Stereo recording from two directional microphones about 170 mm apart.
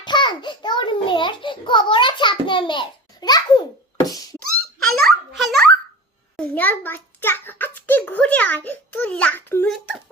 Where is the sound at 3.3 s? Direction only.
25° left (ahead or behind).